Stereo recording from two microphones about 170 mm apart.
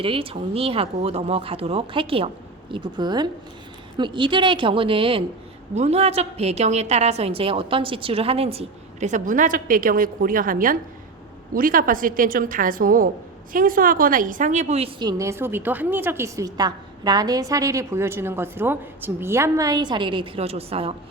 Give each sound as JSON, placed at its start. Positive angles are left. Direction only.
{"t": 0.0, "sound": "a woman's voice", "side_deg": -30}
{"t": 14.9, "sound": "a woman's voice", "side_deg": -20}